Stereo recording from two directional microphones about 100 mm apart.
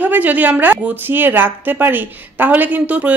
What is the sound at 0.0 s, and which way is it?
A woman's voice, 15° right (ahead or behind).